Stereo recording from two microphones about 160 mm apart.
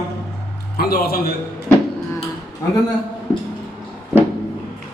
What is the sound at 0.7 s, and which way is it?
Speech, 70° left (ahead or behind).